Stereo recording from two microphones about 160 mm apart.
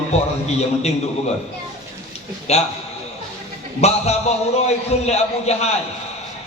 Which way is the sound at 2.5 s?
40° left (ahead or behind).